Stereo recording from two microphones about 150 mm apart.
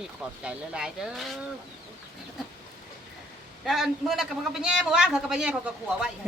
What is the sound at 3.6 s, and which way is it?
A man's voice, centre (ahead or behind).